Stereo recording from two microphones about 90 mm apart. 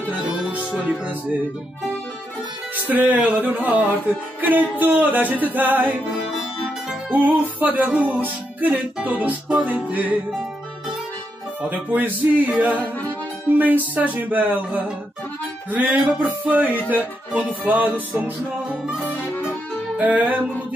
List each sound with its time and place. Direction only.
0.5 s music: 15° right (ahead or behind)
2.7 s music: 20° right (ahead or behind)
6.3 s music: 5° right (ahead or behind)
7.1 s music: 20° right (ahead or behind)
11.7 s music: 20° right (ahead or behind)
20.0 s music: 20° right (ahead or behind)